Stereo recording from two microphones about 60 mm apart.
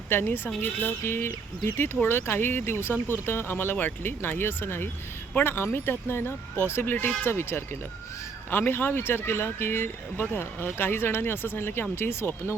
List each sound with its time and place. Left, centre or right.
0.1 s speech: left